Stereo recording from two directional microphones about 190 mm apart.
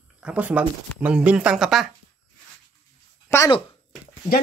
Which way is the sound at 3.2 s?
15° left (ahead or behind).